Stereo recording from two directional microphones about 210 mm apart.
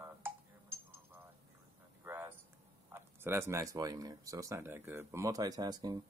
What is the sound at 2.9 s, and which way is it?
Speech, 10° right (ahead or behind).